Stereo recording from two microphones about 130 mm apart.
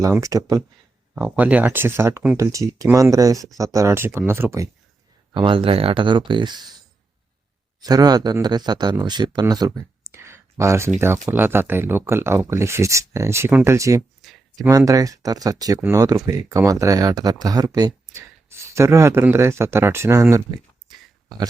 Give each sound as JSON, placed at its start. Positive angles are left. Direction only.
{"t": 0.1, "sound": "speech", "side_deg": -25}
{"t": 1.1, "sound": "speech", "side_deg": -10}
{"t": 5.3, "sound": "speech", "side_deg": -40}
{"t": 7.8, "sound": "speech", "side_deg": -30}
{"t": 14.2, "sound": "a sound", "side_deg": 0}
{"t": 14.7, "sound": "speech", "side_deg": -25}